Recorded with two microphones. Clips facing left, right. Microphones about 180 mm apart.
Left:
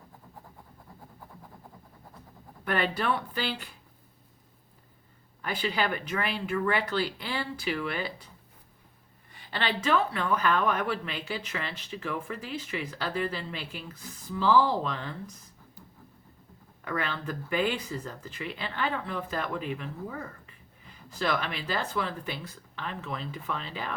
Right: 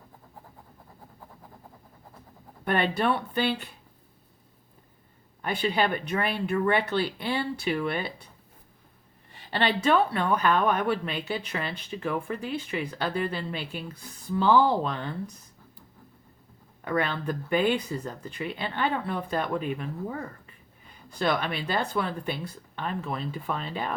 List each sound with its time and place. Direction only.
2.6 s speech: 25° right (ahead or behind)
5.4 s speech: 30° right (ahead or behind)
9.3 s speech: 30° right (ahead or behind)
16.8 s speech: 30° right (ahead or behind)
21.2 s speech: 30° right (ahead or behind)